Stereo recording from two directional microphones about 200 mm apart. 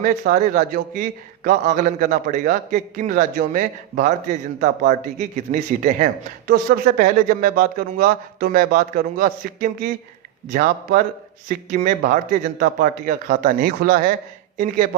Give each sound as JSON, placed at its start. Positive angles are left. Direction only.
{"t": 0.0, "sound": "a man's voice", "side_deg": -40}